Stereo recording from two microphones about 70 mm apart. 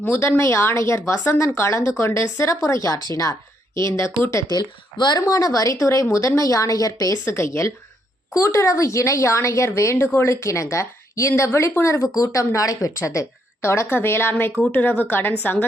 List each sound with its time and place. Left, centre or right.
0.0 s speech: left
3.8 s speech: left
4.4 s a woman's voice: left
5.2 s speech: left
7.3 s speech: left
13.6 s a woman's voice: left